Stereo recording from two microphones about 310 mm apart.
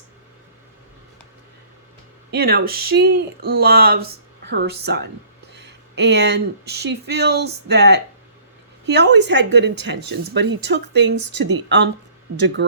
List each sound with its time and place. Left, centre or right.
2.3 s speech: right